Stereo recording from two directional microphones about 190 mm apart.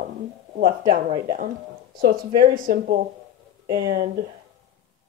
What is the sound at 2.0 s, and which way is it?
Speech, 50° right (ahead or behind).